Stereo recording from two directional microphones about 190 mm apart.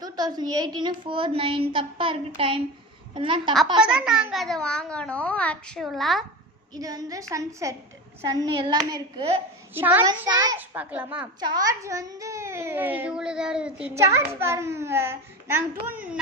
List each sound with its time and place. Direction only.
0.0 s a woman's voice: 20° right (ahead or behind)
3.8 s a child's voice: 5° right (ahead or behind)
6.7 s a child's voice: 20° right (ahead or behind)
9.7 s a child's voice: 10° right (ahead or behind)
10.0 s a woman's voice: 20° right (ahead or behind)
10.6 s a child's voice: 5° right (ahead or behind)
11.3 s a child's voice: 20° right (ahead or behind)